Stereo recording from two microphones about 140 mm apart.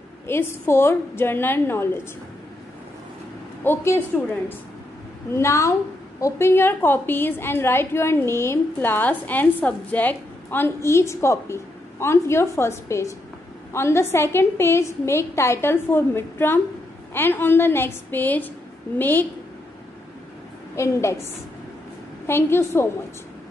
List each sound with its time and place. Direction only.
0.3 s a woman's voice: 15° left (ahead or behind)
3.6 s a woman's voice: 15° left (ahead or behind)
5.3 s a woman's voice: 20° left (ahead or behind)
20.7 s a woman's voice: 20° left (ahead or behind)